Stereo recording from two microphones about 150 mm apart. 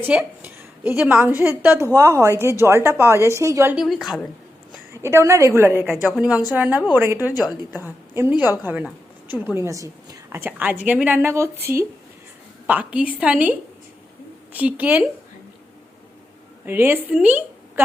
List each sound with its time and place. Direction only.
0.0 s a woman's voice: 10° right (ahead or behind)
3.8 s a woman's voice: centre (ahead or behind)
4.9 s a woman's voice: 20° right (ahead or behind)
5.8 s a woman's voice: 5° right (ahead or behind)
16.6 s a woman's voice: 15° right (ahead or behind)